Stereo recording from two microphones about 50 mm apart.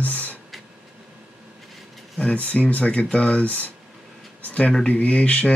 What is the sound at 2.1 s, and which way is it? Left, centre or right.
Speech, left.